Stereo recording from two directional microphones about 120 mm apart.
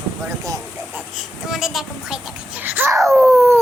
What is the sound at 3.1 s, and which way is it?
Speech, 15° right (ahead or behind).